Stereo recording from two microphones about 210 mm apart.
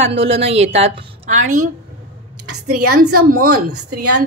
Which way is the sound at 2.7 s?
45° right (ahead or behind).